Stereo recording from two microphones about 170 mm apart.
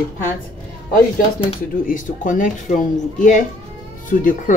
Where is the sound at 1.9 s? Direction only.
50° left (ahead or behind).